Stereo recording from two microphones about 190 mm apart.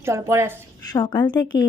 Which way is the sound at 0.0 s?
15° right (ahead or behind).